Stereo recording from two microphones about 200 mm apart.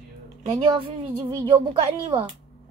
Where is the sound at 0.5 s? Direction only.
25° right (ahead or behind).